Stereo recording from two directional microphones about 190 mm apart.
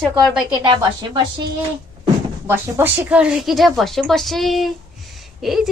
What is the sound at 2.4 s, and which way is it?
A woman's voice, 10° right (ahead or behind).